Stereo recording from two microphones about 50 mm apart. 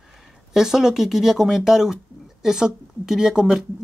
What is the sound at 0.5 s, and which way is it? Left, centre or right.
Speech, centre.